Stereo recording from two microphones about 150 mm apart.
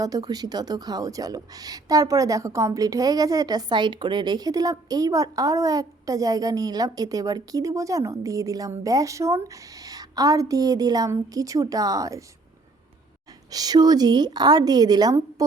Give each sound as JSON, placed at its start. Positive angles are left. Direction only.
{"t": 0.0, "sound": "a woman's voice", "side_deg": -25}
{"t": 13.5, "sound": "a woman's voice", "side_deg": -25}